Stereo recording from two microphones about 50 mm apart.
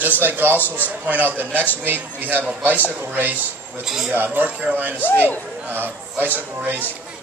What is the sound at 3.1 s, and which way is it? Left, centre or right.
Speech, right.